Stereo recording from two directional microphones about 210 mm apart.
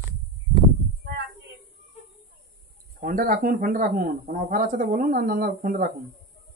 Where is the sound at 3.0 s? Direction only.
40° right (ahead or behind).